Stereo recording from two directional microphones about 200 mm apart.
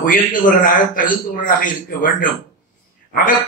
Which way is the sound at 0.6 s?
45° left (ahead or behind).